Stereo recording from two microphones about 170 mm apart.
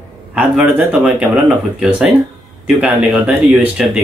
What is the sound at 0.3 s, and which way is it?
Speech, 5° right (ahead or behind).